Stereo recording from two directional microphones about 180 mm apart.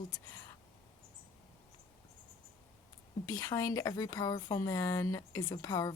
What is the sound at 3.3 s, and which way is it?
Speech, 20° left (ahead or behind).